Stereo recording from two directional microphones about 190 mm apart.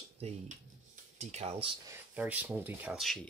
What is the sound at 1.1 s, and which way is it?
Speech, 35° right (ahead or behind).